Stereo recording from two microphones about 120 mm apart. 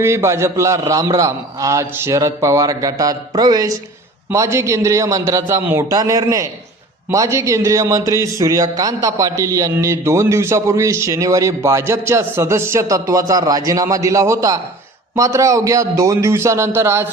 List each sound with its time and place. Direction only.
0.0 s a man's voice: 25° right (ahead or behind)